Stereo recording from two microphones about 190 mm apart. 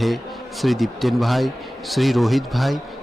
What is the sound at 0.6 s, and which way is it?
A man's voice, centre (ahead or behind).